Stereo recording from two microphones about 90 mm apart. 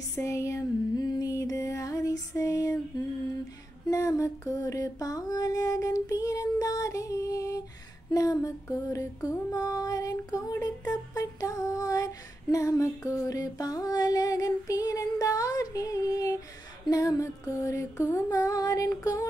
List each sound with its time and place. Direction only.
0.2 s music: 35° left (ahead or behind)
3.9 s music: 35° left (ahead or behind)